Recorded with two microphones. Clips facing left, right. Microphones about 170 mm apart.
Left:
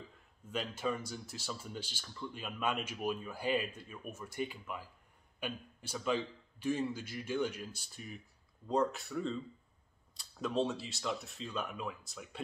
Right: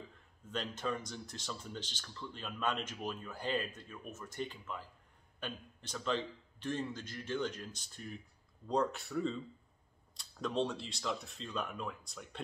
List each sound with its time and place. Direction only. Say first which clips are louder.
0.5 s speech: left 2 dB; 10° left (ahead or behind)